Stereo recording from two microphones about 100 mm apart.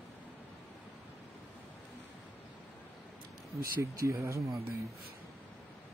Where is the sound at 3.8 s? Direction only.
30° right (ahead or behind).